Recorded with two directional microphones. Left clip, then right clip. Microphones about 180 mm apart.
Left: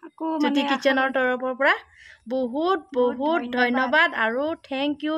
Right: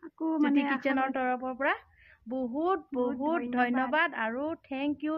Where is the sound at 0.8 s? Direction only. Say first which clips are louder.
Left 8 dB; 40° left (ahead or behind).